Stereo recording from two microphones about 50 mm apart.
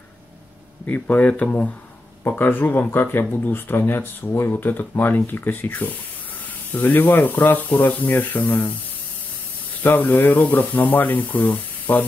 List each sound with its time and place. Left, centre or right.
0.8 s speech: left
2.2 s speech: left
9.9 s speech: left